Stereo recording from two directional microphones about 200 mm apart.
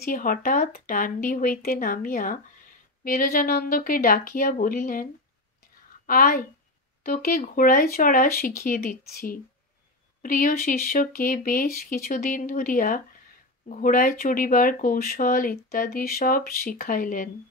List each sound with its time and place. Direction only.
0.0 s speech: 45° left (ahead or behind)
6.0 s speech: 45° left (ahead or behind)